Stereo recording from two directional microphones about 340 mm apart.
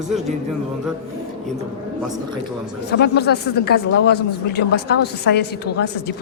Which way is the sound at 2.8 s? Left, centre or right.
Left.